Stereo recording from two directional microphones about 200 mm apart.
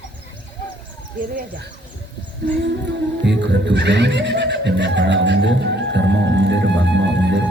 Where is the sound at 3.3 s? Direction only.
60° right (ahead or behind).